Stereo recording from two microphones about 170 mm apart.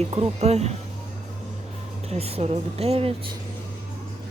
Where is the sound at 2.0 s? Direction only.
35° right (ahead or behind).